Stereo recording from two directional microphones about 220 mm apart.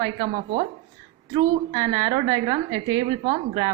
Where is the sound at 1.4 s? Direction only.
15° right (ahead or behind).